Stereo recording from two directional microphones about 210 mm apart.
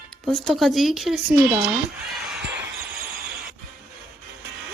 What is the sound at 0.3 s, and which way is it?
Speech, centre (ahead or behind).